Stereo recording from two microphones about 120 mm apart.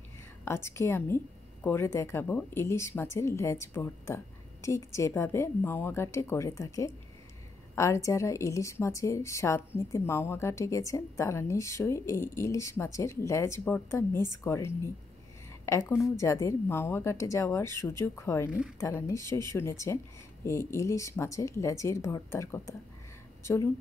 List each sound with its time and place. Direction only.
0.5 s a woman's voice: 20° left (ahead or behind)